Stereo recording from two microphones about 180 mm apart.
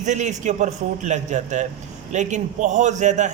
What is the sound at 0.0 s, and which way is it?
A man's voice, 40° right (ahead or behind).